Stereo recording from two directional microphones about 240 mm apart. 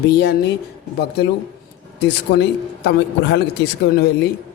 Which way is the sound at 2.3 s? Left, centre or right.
Left.